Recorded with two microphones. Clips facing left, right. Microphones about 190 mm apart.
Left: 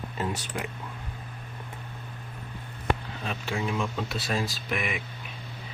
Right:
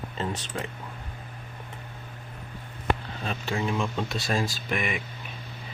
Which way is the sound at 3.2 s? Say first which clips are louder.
Right 2 dB; 5° left (ahead or behind).